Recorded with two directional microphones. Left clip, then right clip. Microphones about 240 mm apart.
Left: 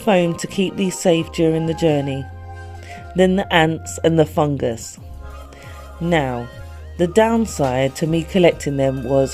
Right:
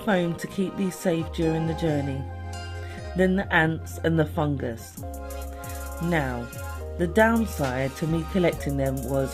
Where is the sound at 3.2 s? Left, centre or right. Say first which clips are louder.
Left 7 dB; left.